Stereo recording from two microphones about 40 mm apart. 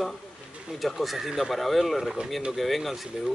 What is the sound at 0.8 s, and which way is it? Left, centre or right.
Speech, centre.